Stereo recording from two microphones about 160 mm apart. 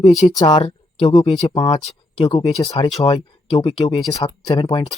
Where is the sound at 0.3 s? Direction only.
25° left (ahead or behind).